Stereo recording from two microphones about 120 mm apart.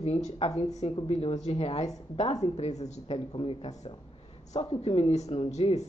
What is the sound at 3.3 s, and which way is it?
Speech, 55° left (ahead or behind).